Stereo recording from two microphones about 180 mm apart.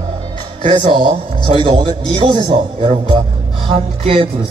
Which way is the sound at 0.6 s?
35° right (ahead or behind).